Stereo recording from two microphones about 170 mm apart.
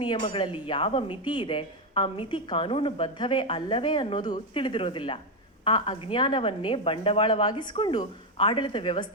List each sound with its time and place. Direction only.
0.0 s a woman's voice: 30° left (ahead or behind)